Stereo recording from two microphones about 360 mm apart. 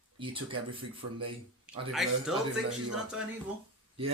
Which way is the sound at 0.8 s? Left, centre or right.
Right.